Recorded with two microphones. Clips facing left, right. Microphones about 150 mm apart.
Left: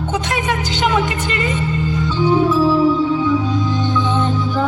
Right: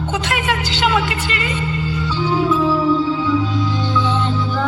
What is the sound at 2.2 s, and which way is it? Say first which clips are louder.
Music: left 3 dB; 15° left (ahead or behind).